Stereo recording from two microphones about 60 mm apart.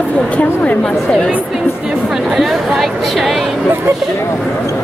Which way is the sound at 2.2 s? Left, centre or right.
Centre.